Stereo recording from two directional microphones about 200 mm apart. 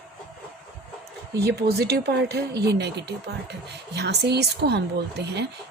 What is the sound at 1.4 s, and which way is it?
Speech, 55° right (ahead or behind).